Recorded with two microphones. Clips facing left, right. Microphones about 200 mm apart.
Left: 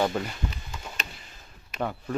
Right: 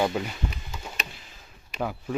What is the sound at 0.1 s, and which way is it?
Speech, 5° right (ahead or behind).